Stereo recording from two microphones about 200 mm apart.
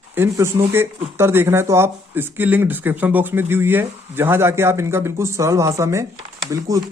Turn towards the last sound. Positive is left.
turn(degrees=-15)  # may be behind; listen again after turning